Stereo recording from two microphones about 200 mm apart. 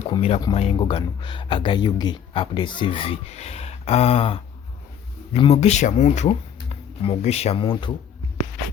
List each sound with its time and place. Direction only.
0.1 s speech: 25° left (ahead or behind)